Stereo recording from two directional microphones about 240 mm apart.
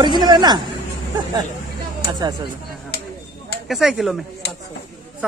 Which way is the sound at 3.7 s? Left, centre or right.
Centre.